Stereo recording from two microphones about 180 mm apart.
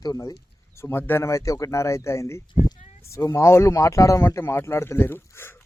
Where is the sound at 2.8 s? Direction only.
40° left (ahead or behind).